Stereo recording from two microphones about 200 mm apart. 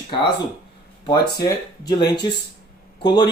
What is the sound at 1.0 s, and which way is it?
Speech, 20° left (ahead or behind).